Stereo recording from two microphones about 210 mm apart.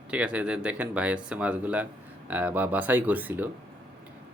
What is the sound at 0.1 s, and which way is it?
Speech, 5° right (ahead or behind).